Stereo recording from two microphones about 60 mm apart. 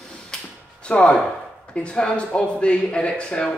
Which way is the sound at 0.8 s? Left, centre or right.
Centre.